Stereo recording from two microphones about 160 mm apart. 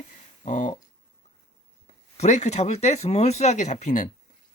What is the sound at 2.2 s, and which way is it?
Speech, 45° left (ahead or behind).